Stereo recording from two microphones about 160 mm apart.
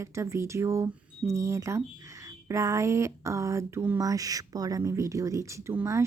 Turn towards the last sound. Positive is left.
turn(degrees=-15)  # may be behind; listen again after turning